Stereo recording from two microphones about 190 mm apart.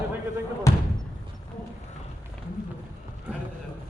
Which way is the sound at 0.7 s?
15° left (ahead or behind).